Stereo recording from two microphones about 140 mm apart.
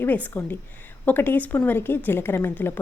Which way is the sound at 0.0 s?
15° left (ahead or behind).